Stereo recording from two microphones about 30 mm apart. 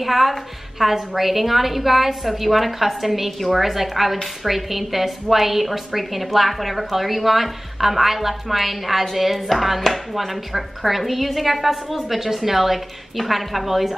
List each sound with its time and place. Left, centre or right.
0.0 s a woman's voice: centre